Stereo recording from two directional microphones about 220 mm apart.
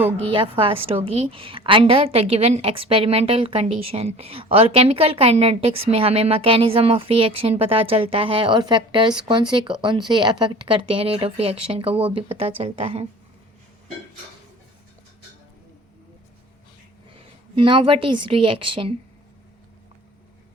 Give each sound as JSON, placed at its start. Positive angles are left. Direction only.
{"t": 0.3, "sound": "a woman's voice", "side_deg": -25}
{"t": 17.2, "sound": "a woman's voice", "side_deg": -25}